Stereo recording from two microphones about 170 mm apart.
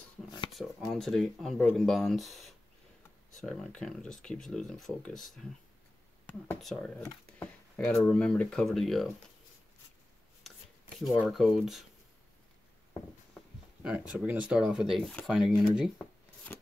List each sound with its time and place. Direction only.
0.6 s speech: centre (ahead or behind)
11.0 s speech: centre (ahead or behind)
13.8 s speech: 5° right (ahead or behind)